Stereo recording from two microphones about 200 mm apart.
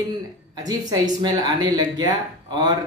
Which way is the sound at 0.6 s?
20° right (ahead or behind).